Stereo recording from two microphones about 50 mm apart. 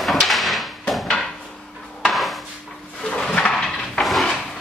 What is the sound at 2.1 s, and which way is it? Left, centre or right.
Dishes, centre.